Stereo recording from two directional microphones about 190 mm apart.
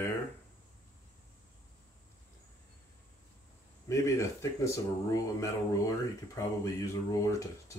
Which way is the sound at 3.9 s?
15° left (ahead or behind).